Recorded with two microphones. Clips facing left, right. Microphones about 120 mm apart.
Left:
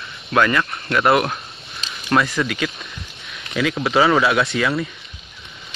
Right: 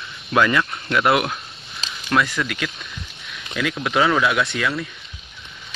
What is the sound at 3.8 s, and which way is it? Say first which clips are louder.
Speech: left 2 dB; 5° left (ahead or behind).